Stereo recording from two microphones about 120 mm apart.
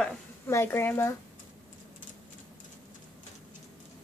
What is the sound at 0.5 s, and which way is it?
Speech, 20° left (ahead or behind).